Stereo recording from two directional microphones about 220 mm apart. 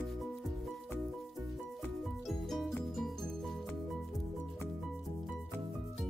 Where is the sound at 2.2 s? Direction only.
Centre (ahead or behind).